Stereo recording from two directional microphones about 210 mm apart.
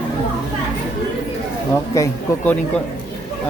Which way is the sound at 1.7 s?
15° left (ahead or behind).